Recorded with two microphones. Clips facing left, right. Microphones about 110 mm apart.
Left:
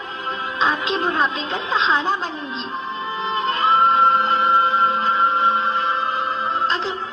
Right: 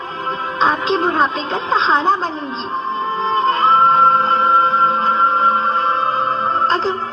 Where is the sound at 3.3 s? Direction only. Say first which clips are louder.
Right 5 dB; 30° right (ahead or behind).